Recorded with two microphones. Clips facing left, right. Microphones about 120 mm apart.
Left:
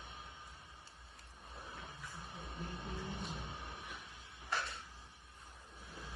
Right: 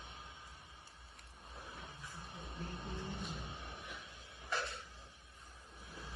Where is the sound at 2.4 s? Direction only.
Centre (ahead or behind).